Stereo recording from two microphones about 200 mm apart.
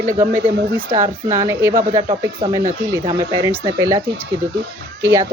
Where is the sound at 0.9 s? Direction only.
20° right (ahead or behind).